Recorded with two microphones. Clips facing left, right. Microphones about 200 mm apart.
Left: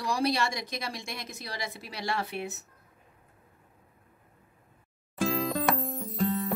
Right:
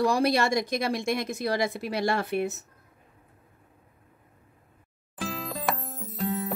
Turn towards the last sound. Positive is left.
turn(degrees=0)  # may be behind; listen again after turning